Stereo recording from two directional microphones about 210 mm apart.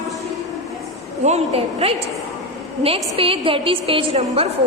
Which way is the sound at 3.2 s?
25° right (ahead or behind).